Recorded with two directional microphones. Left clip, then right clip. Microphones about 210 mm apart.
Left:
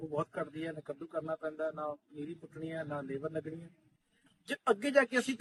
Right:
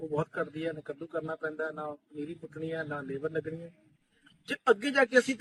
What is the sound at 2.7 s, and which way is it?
Speech, 30° left (ahead or behind).